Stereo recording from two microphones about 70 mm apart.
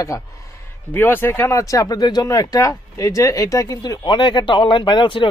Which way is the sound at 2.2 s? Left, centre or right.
Left.